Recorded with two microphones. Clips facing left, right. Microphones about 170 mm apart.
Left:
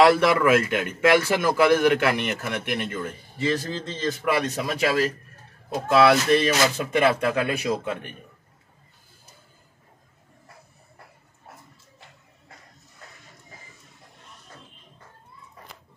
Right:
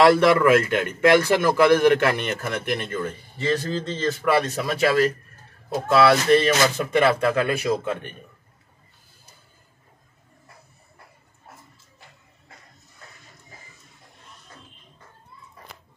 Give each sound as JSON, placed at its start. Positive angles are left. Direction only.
{"t": 0.0, "sound": "a man's voice", "side_deg": 5}